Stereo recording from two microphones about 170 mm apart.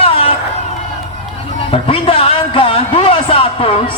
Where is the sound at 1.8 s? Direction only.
35° left (ahead or behind).